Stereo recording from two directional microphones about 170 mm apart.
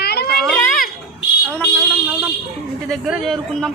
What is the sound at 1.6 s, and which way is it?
A woman's voice, 5° right (ahead or behind).